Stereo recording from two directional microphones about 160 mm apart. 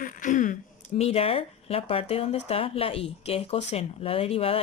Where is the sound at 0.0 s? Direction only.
55° left (ahead or behind).